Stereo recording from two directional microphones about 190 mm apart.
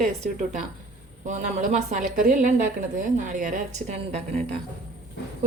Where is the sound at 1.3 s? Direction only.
40° right (ahead or behind).